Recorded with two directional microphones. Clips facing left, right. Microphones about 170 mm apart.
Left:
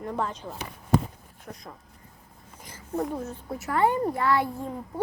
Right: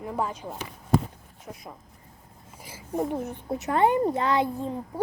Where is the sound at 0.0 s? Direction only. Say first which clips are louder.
Right 1 dB; 5° right (ahead or behind).